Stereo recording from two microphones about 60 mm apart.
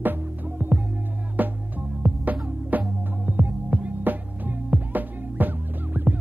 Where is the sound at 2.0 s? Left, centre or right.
Right.